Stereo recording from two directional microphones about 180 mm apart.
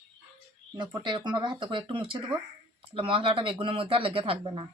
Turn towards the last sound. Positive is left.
turn(degrees=-30)  # may be behind; listen again after turning